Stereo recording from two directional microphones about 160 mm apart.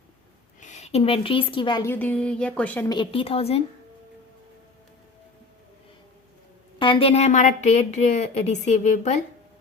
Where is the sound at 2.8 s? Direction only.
30° left (ahead or behind).